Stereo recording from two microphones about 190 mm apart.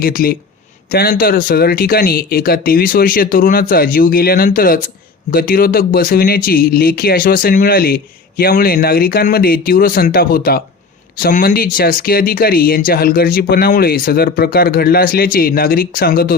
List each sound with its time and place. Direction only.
0.0 s speech: 50° left (ahead or behind)